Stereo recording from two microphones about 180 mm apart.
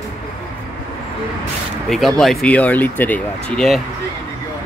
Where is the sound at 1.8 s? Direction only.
Centre (ahead or behind).